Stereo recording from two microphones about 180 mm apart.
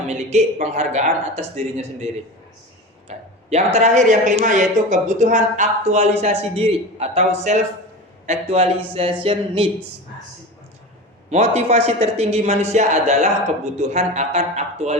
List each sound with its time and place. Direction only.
0.1 s speech: 40° right (ahead or behind)
3.1 s speech: 40° right (ahead or behind)
11.3 s speech: 40° right (ahead or behind)